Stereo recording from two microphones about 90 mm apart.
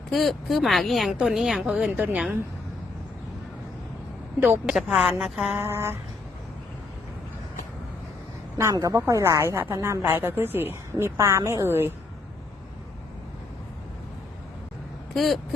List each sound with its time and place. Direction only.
0.1 s speech: centre (ahead or behind)
4.7 s speech: 5° right (ahead or behind)
5.5 s a sound: 30° right (ahead or behind)
8.7 s speech: 45° right (ahead or behind)
9.0 s a woman's voice: 35° right (ahead or behind)
10.2 s a sound: 25° right (ahead or behind)
10.9 s a woman's voice: 35° right (ahead or behind)
15.1 s speech: centre (ahead or behind)